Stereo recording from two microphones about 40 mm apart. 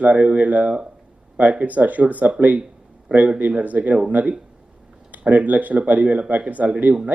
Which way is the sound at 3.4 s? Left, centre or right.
Right.